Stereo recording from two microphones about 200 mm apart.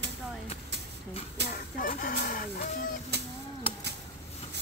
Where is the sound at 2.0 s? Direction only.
45° left (ahead or behind).